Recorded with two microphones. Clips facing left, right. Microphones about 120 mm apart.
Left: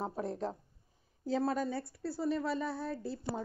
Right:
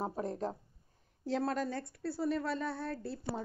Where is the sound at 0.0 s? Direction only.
Centre (ahead or behind).